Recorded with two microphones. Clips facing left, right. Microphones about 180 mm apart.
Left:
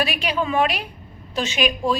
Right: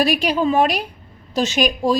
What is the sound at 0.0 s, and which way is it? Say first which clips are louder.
A woman's voice: right 6 dB; 40° right (ahead or behind).